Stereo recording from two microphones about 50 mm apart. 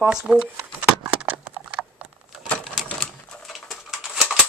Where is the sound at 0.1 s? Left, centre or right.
Right.